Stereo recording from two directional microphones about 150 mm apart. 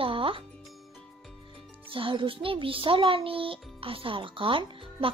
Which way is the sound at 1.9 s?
35° right (ahead or behind).